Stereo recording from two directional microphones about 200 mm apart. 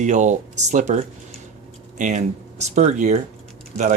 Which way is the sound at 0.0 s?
35° right (ahead or behind).